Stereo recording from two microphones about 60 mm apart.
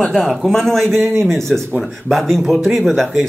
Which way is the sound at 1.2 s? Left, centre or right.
Centre.